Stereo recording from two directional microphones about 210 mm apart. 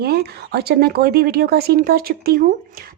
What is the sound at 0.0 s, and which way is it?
Speech, 50° right (ahead or behind).